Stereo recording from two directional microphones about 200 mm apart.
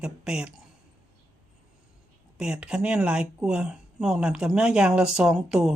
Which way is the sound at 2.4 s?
5° right (ahead or behind).